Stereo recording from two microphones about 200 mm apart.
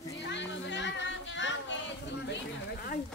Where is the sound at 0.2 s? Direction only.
60° left (ahead or behind).